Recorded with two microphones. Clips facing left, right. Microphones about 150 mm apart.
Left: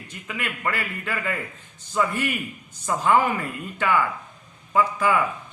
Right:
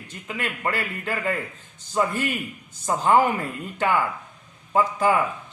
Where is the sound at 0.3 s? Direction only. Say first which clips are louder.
Right 1 dB; 30° right (ahead or behind).